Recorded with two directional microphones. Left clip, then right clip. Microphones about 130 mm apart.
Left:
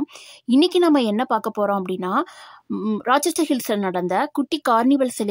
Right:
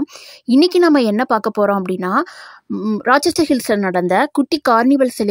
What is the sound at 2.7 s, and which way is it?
Speech, 10° right (ahead or behind).